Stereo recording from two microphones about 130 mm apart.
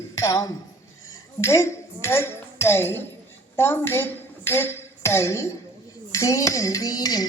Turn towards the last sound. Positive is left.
turn(degrees=30)  # may be behind; listen again after turning